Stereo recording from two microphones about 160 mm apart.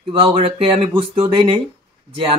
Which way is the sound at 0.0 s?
35° right (ahead or behind).